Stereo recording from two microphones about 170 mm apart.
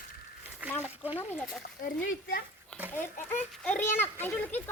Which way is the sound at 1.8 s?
60° left (ahead or behind).